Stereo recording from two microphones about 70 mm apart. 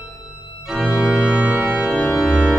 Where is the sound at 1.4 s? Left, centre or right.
Right.